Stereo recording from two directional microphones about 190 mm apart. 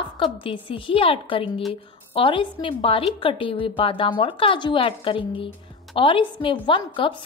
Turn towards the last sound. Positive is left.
turn(degrees=25)  # may be behind; listen again after turning